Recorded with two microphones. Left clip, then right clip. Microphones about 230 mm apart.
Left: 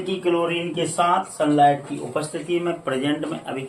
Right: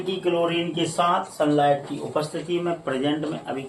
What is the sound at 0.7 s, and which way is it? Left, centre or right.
Speech, centre.